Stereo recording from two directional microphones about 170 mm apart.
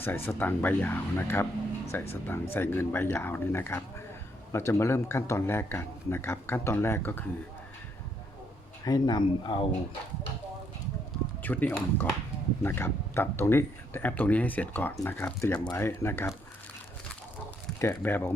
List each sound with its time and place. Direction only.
0.0 s speech: 10° left (ahead or behind)
8.8 s speech: 25° left (ahead or behind)
11.4 s speech: 10° left (ahead or behind)
17.7 s speech: 15° left (ahead or behind)